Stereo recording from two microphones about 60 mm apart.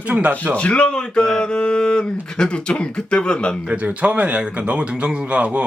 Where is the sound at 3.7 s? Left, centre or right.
Right.